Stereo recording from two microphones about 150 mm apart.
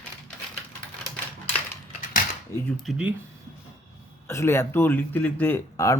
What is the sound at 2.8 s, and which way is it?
Speech, 10° right (ahead or behind).